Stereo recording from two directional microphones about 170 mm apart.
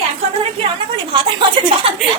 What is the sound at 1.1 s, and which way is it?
Speech, 30° right (ahead or behind).